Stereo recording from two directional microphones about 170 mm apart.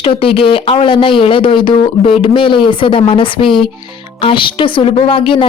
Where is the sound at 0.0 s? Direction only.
30° left (ahead or behind).